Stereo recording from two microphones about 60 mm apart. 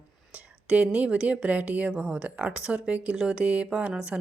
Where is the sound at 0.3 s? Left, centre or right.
Right.